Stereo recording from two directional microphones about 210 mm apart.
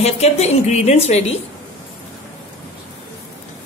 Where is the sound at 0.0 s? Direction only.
30° left (ahead or behind).